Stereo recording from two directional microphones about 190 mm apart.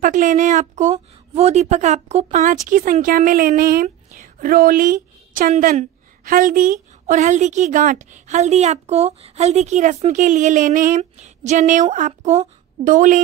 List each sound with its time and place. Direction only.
0.0 s a woman's voice: 40° right (ahead or behind)